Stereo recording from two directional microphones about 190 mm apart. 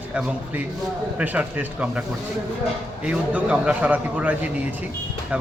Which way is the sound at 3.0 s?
5° right (ahead or behind).